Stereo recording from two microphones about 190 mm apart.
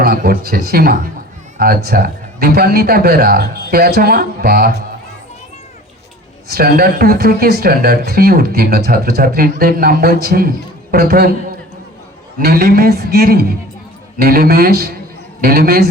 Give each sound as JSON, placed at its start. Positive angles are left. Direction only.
{"t": 0.0, "sound": "a man's voice", "side_deg": -50}
{"t": 6.5, "sound": "a man's voice", "side_deg": -50}
{"t": 12.4, "sound": "a man's voice", "side_deg": -50}